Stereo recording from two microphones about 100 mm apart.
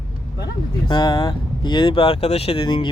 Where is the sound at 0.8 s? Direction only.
45° left (ahead or behind); by 2.6 s 85° left.